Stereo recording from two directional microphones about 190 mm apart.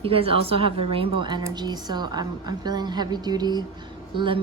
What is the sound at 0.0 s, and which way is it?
A woman's voice, 30° right (ahead or behind).